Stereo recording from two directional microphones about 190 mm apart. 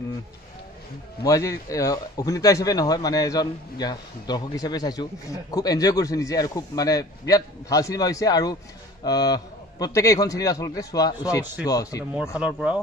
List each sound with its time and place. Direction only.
1.2 s a man's voice: 15° left (ahead or behind)
12.4 s speech: 5° right (ahead or behind)